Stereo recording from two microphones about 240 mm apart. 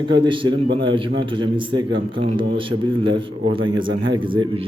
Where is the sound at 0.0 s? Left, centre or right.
Centre.